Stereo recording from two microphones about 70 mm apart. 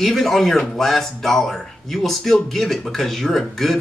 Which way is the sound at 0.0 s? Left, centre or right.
Centre.